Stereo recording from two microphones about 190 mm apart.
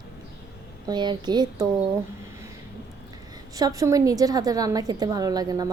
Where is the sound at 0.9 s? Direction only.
25° right (ahead or behind).